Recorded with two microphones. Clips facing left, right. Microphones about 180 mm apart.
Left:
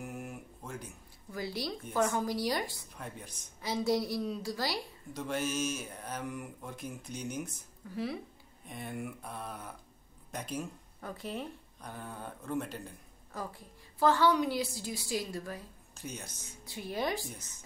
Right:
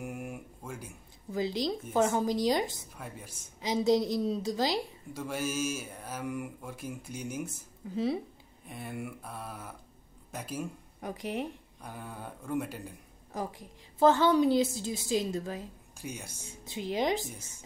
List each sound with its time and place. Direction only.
0.0 s a sound: 10° right (ahead or behind)
1.3 s a woman's voice: 20° right (ahead or behind)
3.0 s speech: 5° right (ahead or behind)
3.6 s a woman's voice: 20° right (ahead or behind)
5.1 s speech: 5° right (ahead or behind)
7.9 s a woman's voice: 25° right (ahead or behind)
8.6 s speech: 5° right (ahead or behind)
11.0 s a woman's voice: 15° right (ahead or behind)